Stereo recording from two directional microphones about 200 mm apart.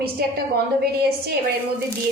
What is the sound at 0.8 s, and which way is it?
Speech, 50° right (ahead or behind).